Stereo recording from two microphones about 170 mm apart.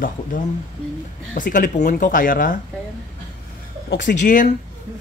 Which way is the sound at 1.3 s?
50° left (ahead or behind).